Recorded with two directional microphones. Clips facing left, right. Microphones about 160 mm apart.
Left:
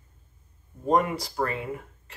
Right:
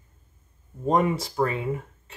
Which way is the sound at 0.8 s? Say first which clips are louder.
Right 1 dB; 20° right (ahead or behind).